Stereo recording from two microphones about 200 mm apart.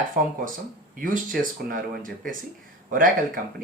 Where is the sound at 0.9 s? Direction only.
45° right (ahead or behind).